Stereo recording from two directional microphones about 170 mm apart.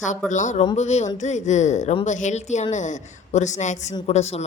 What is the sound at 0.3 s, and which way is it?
A woman's voice, 45° left (ahead or behind).